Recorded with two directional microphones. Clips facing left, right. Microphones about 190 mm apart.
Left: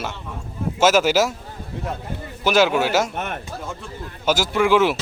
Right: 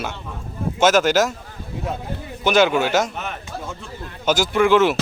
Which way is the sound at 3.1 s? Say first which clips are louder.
Left 2 dB; 50° left (ahead or behind).